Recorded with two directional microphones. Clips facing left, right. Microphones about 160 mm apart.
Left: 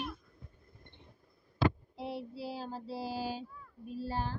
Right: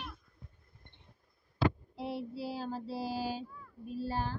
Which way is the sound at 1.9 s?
5° right (ahead or behind).